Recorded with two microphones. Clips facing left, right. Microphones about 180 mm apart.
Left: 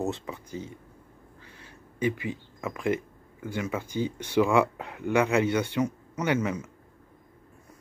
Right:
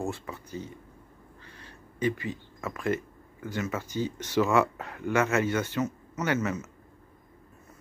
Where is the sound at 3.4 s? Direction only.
15° left (ahead or behind).